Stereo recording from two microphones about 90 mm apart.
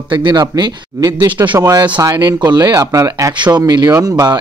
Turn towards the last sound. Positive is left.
turn(degrees=-40)  # may be behind; listen again after turning